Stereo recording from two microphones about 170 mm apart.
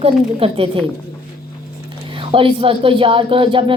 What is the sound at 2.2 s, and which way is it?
A woman's voice, 30° right (ahead or behind).